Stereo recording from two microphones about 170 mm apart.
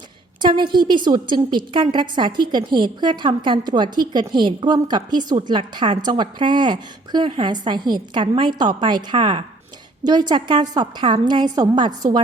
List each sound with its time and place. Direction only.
0.4 s a woman's voice: 25° right (ahead or behind)